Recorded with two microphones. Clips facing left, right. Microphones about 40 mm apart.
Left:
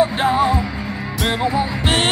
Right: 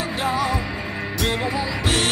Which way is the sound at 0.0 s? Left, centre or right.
Left.